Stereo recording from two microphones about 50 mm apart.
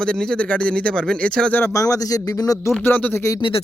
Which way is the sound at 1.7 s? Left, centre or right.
Left.